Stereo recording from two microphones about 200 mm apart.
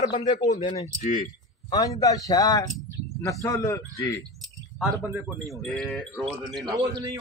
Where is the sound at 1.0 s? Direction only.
40° left (ahead or behind).